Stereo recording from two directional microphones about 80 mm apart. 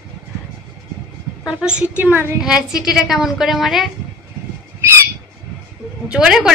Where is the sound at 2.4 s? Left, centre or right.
Centre.